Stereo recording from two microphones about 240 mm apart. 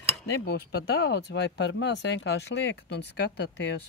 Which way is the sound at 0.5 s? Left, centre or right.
Left.